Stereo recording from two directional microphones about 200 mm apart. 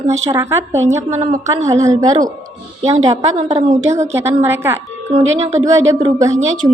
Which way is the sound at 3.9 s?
15° right (ahead or behind).